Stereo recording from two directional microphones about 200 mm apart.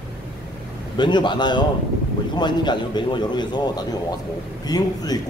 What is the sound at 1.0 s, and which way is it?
A man's voice, 20° left (ahead or behind).